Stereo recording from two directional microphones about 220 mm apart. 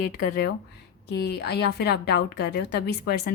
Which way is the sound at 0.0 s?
45° left (ahead or behind).